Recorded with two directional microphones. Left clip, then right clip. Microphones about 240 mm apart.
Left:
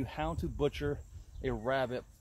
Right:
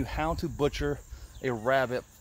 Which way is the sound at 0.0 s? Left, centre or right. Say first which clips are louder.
Right 6 dB; right.